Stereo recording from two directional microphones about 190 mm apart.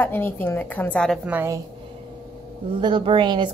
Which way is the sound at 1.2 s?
10° right (ahead or behind).